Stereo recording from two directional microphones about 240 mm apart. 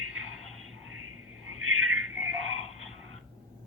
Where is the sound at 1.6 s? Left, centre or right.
Right.